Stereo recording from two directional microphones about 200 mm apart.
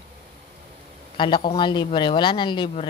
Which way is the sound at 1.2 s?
25° left (ahead or behind).